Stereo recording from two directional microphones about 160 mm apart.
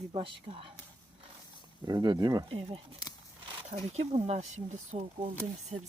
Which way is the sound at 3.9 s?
40° right (ahead or behind).